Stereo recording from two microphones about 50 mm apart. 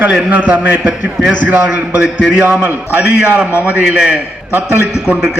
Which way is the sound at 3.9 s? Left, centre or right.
Right.